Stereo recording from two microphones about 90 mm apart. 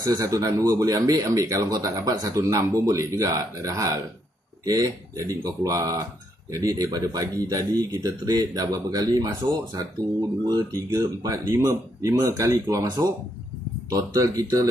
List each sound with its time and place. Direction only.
0.0 s speech: 45° right (ahead or behind)
13.8 s speech: 40° right (ahead or behind)